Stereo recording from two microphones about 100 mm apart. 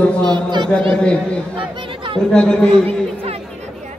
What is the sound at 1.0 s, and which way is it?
A man's voice, 10° left (ahead or behind).